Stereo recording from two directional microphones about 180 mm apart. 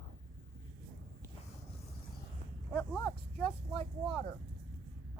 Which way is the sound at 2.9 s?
5° left (ahead or behind).